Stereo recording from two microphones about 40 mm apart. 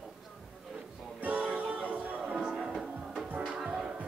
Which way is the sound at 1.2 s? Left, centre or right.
Right.